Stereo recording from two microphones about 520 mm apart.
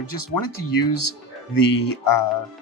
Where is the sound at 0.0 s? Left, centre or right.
Left.